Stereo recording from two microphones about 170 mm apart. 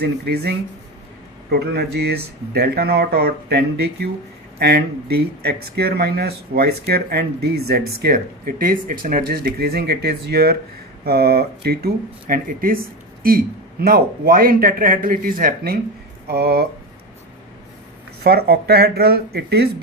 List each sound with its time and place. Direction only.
0.0 s speech: 70° right (ahead or behind)
13.8 s speech: 60° right (ahead or behind)
16.2 s speech: 70° right (ahead or behind)
18.2 s speech: 65° right (ahead or behind)